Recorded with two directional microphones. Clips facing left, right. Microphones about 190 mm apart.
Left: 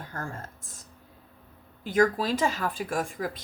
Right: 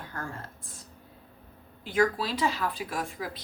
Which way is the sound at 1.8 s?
45° left (ahead or behind).